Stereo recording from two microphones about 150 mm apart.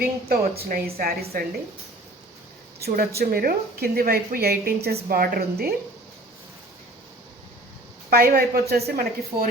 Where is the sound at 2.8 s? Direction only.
80° right.